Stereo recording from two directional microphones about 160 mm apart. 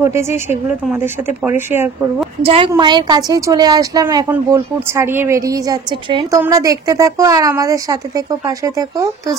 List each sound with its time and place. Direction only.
0.0 s speech: 15° right (ahead or behind)
1.4 s speech: 15° right (ahead or behind)
2.4 s a woman's voice: 35° right (ahead or behind)
6.3 s a woman's voice: 20° right (ahead or behind)